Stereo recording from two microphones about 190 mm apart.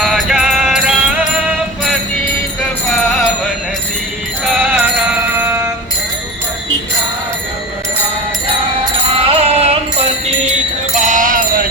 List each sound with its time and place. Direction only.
0.0 s music: centre (ahead or behind)
4.4 s music: 5° right (ahead or behind)
9.3 s music: 30° right (ahead or behind)